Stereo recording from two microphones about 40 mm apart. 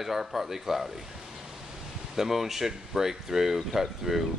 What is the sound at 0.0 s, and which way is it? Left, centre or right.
Speech, centre.